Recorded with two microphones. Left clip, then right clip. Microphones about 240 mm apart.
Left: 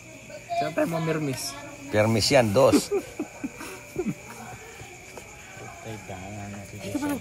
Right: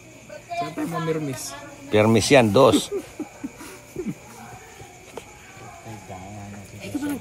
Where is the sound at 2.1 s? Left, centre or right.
Right.